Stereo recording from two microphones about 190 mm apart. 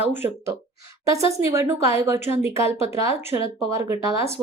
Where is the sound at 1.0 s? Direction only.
15° right (ahead or behind).